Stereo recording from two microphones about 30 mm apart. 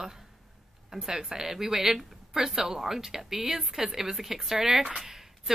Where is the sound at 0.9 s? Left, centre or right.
Centre.